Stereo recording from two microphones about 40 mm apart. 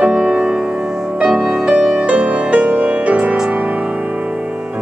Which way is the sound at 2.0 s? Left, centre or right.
Right.